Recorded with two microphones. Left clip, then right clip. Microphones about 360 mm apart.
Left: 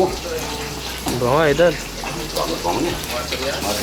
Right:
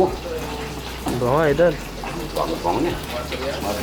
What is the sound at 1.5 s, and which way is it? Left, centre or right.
Speech, centre.